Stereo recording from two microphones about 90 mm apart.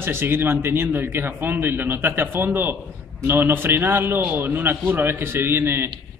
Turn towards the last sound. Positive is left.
turn(degrees=-25)  # may be behind; listen again after turning